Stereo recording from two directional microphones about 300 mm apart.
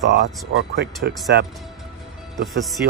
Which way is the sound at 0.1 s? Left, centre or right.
Right.